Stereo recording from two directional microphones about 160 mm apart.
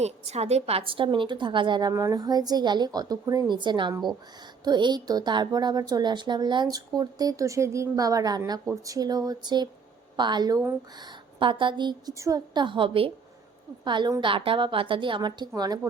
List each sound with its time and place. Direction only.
0.0 s a woman's voice: 40° right (ahead or behind); by 15.8 s 25° right (ahead or behind)